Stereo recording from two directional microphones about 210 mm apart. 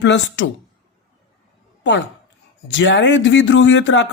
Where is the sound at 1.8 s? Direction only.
55° left (ahead or behind).